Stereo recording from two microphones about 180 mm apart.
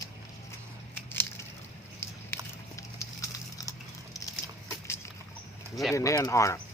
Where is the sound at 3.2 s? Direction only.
20° left (ahead or behind).